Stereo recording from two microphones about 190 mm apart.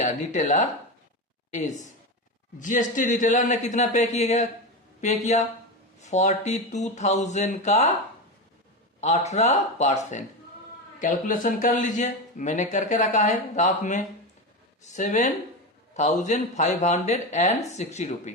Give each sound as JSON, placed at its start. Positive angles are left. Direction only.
{"t": 0.0, "sound": "a woman's voice", "side_deg": 40}
{"t": 9.0, "sound": "a man's voice", "side_deg": 35}